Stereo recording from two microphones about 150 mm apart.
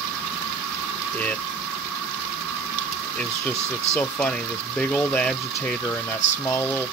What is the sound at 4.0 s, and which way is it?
Speech, 10° left (ahead or behind).